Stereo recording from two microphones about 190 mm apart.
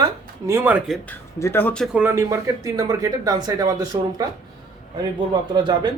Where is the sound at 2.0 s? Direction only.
15° right (ahead or behind).